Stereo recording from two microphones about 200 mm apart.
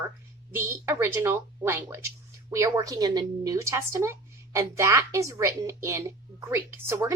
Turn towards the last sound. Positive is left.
turn(degrees=-10)  # may be behind; listen again after turning